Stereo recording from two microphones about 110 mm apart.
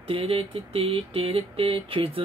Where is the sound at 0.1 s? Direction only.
65° right (ahead or behind).